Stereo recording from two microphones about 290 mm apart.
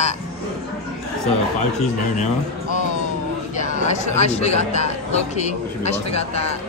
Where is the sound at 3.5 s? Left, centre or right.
Left.